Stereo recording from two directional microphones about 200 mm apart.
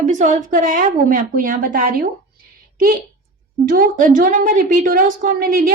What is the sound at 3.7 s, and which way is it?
A woman's voice, 45° right (ahead or behind).